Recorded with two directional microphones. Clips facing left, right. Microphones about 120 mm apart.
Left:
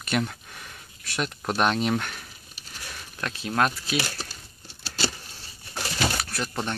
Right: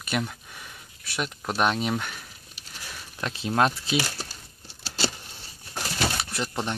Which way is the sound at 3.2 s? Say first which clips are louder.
Right 1 dB; 20° right (ahead or behind).